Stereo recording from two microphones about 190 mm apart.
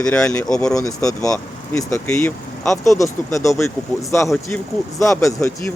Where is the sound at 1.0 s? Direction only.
20° left (ahead or behind).